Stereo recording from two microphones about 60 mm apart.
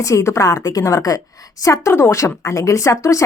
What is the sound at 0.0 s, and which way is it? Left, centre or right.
A woman's voice, left.